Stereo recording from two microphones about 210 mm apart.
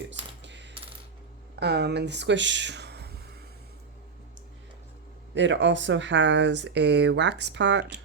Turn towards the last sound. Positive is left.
turn(degrees=-55)  # may be behind; listen again after turning